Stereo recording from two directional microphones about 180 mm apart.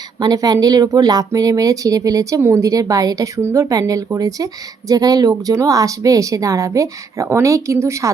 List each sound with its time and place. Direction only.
0.2 s speech: 20° right (ahead or behind)